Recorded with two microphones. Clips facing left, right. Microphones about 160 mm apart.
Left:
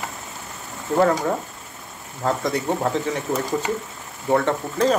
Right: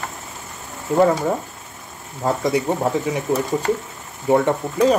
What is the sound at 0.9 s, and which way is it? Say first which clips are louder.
Speech: right 3 dB; 10° right (ahead or behind).